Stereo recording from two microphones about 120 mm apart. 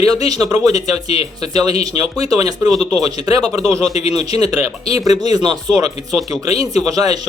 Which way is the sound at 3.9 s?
65° left (ahead or behind).